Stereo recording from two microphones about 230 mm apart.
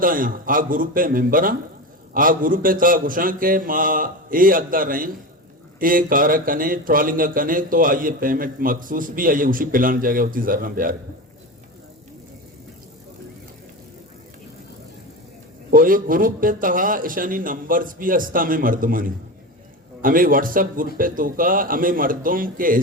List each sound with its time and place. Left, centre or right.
0.0 s speech: right
15.7 s speech: right